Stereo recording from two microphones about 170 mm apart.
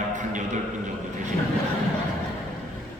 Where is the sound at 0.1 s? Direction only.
45° right (ahead or behind).